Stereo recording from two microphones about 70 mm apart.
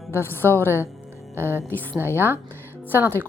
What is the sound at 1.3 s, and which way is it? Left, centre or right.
Speech, right.